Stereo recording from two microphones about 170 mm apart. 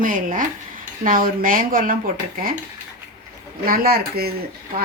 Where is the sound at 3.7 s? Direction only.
65° right (ahead or behind).